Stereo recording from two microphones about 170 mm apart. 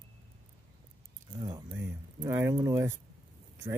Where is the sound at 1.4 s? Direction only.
20° right (ahead or behind).